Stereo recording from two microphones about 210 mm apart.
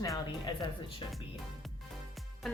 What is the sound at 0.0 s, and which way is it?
Speech, 15° left (ahead or behind).